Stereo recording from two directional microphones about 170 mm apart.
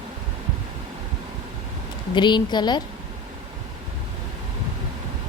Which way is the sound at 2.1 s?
25° left (ahead or behind).